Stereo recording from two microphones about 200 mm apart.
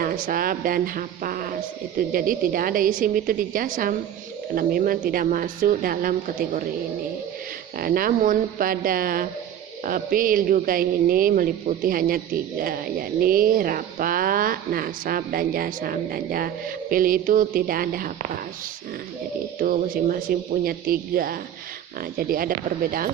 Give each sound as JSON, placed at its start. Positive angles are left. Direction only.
{"t": 0.0, "sound": "speech", "side_deg": -45}
{"t": 7.8, "sound": "speech", "side_deg": -45}
{"t": 19.5, "sound": "speech", "side_deg": -40}